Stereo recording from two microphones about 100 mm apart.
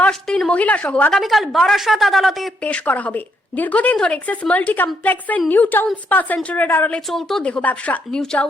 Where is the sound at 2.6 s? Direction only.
15° left (ahead or behind).